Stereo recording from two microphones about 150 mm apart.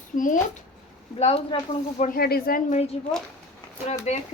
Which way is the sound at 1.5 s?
55° left (ahead or behind).